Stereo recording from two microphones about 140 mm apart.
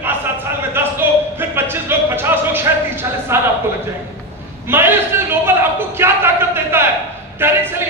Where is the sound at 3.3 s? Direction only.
15° right (ahead or behind).